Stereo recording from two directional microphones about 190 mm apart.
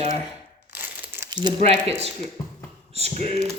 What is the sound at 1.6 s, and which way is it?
Speech, 35° right (ahead or behind).